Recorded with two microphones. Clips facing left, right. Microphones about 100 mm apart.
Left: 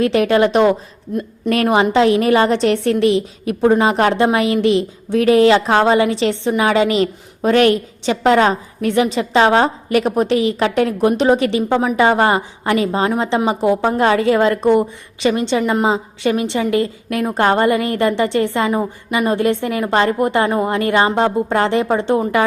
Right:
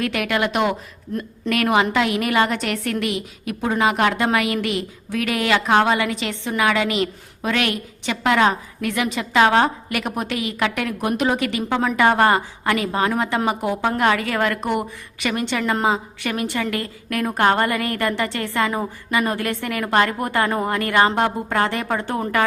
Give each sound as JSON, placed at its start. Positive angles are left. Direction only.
{"t": 0.0, "sound": "a woman's voice", "side_deg": 30}